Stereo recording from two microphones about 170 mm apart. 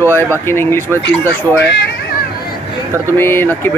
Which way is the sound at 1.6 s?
75° left (ahead or behind).